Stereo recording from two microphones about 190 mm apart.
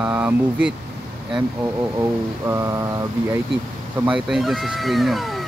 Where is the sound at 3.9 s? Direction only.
5° right (ahead or behind).